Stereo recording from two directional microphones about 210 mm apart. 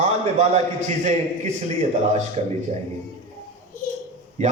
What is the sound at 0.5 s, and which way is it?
Speech, 30° right (ahead or behind).